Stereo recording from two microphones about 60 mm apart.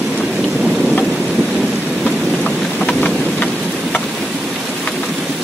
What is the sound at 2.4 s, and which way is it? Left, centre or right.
Vehicle, left.